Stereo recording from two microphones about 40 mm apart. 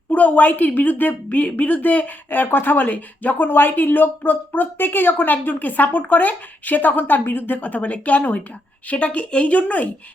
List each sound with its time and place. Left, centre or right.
0.1 s speech: left
1.4 s speech: left